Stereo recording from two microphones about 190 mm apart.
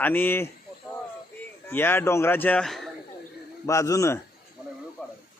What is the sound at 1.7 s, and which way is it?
A man's voice, 10° left (ahead or behind).